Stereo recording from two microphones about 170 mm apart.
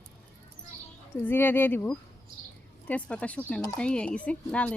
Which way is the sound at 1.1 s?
10° left (ahead or behind).